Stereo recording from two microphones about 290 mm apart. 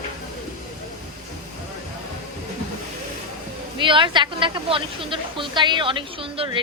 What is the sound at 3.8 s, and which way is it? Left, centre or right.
A woman's voice, centre.